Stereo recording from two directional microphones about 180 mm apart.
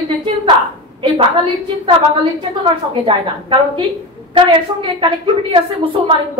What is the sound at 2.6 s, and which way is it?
A woman's voice, 30° right (ahead or behind).